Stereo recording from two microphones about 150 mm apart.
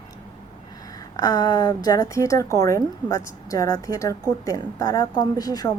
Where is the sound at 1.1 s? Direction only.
25° left (ahead or behind).